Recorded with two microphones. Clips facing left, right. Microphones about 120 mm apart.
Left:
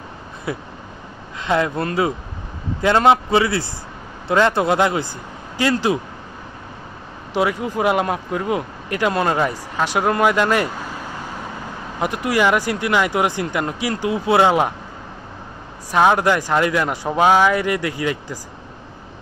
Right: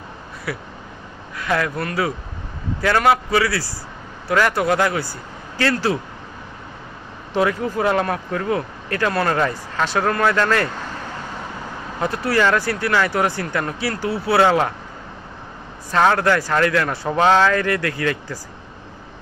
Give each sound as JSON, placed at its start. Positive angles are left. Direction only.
{"t": 0.5, "sound": "a man's voice", "side_deg": 25}
{"t": 7.3, "sound": "speech", "side_deg": 15}
{"t": 12.0, "sound": "speech", "side_deg": 15}
{"t": 15.9, "sound": "speech", "side_deg": 15}